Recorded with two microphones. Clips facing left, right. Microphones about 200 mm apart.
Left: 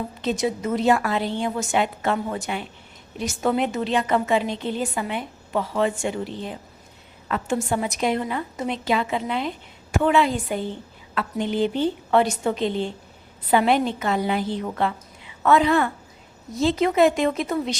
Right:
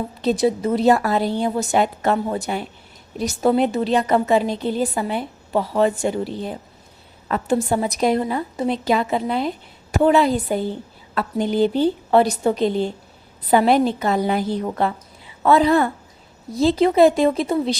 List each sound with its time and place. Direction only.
0.2 s a woman's voice: 35° right (ahead or behind)